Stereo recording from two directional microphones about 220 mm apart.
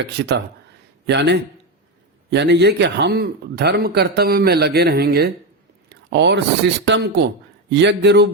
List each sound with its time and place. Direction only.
0.0 s a man's voice: 50° right (ahead or behind)
5.9 s a sound: 50° right (ahead or behind)
6.8 s a man's voice: 50° right (ahead or behind)